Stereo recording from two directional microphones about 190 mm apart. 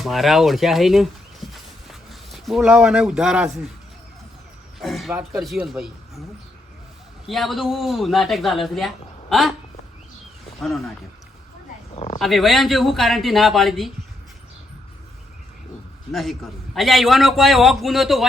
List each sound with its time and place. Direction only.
0.0 s a man's voice: centre (ahead or behind)
4.8 s a man's voice: centre (ahead or behind)
7.3 s a man's voice: centre (ahead or behind)
10.6 s a man's voice: centre (ahead or behind)
11.9 s speech: 30° left (ahead or behind)
12.2 s a man's voice: centre (ahead or behind)
16.1 s a man's voice: centre (ahead or behind)